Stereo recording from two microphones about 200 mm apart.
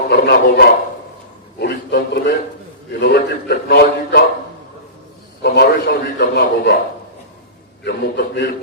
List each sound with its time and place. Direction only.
0.1 s a man's voice: 50° left (ahead or behind)
5.4 s a man's voice: 55° left (ahead or behind)
7.9 s a man's voice: 55° left (ahead or behind)